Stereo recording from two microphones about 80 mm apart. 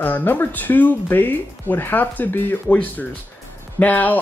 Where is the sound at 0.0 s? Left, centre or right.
Left.